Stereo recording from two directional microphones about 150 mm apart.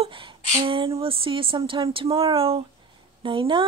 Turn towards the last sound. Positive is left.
turn(degrees=-35)  # may be behind; listen again after turning